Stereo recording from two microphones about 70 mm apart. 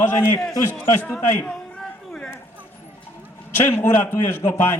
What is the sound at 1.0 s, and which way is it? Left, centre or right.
Speech, centre.